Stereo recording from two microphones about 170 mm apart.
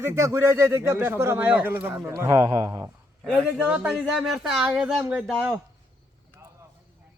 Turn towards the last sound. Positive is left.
turn(degrees=-10)  # may be behind; listen again after turning